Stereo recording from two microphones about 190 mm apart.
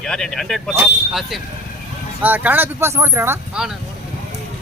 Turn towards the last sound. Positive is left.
turn(degrees=-10)  # may be behind; listen again after turning